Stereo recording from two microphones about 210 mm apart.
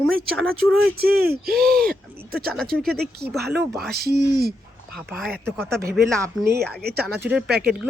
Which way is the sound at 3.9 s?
50° right (ahead or behind).